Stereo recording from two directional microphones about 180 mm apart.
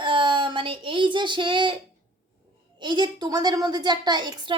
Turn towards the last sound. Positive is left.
turn(degrees=-25)  # may be behind; listen again after turning